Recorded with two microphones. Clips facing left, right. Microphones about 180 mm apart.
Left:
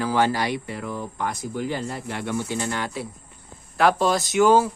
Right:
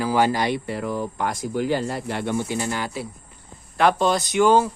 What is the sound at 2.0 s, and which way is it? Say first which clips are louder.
Speech: right 3 dB; 30° right (ahead or behind).